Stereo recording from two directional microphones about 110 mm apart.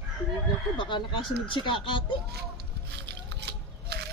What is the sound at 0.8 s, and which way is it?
Speech, 45° left (ahead or behind).